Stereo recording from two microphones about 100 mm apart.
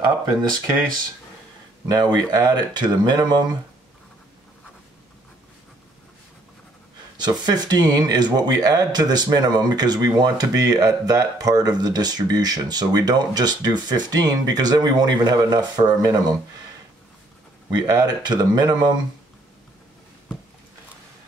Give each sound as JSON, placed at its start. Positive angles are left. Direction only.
{"t": 1.9, "sound": "speech", "side_deg": -45}
{"t": 7.2, "sound": "speech", "side_deg": -45}
{"t": 17.6, "sound": "speech", "side_deg": -40}